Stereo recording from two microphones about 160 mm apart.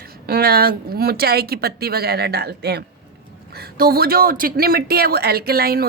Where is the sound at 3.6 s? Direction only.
70° right (ahead or behind).